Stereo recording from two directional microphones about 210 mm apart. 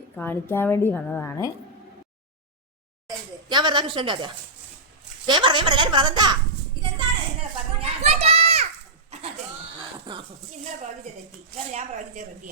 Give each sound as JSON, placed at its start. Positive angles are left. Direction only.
{"t": 0.2, "sound": "a woman's voice", "side_deg": 10}
{"t": 3.1, "sound": "a sound", "side_deg": -20}
{"t": 5.2, "sound": "a woman's voice", "side_deg": -20}
{"t": 7.3, "sound": "children playing", "side_deg": -30}
{"t": 10.1, "sound": "a woman's voice", "side_deg": -20}
{"t": 11.7, "sound": "a woman's voice", "side_deg": -35}